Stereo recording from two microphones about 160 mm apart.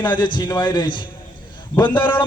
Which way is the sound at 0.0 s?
30° left (ahead or behind).